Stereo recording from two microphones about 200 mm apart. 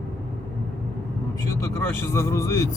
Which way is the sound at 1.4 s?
15° left (ahead or behind).